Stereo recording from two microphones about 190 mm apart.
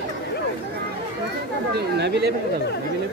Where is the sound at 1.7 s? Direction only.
60° right (ahead or behind).